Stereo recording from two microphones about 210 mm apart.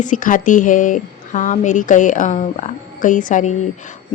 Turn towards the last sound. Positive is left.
turn(degrees=35)  # may be behind; listen again after turning